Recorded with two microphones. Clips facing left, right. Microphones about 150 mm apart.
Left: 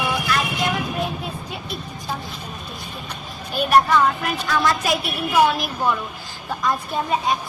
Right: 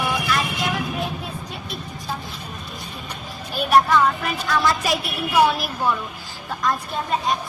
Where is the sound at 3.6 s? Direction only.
Centre (ahead or behind).